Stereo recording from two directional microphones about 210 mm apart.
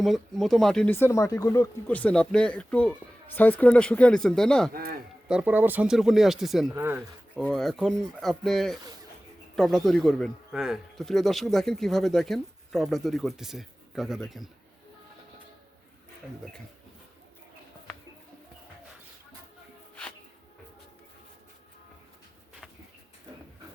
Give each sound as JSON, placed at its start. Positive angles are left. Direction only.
{"t": 0.0, "sound": "a man's voice", "side_deg": 0}
{"t": 4.7, "sound": "speech", "side_deg": -45}
{"t": 5.3, "sound": "a man's voice", "side_deg": -5}
{"t": 6.7, "sound": "speech", "side_deg": -10}
{"t": 7.3, "sound": "a man's voice", "side_deg": 0}